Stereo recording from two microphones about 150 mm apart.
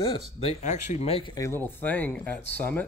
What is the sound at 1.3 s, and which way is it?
Speech, 20° left (ahead or behind).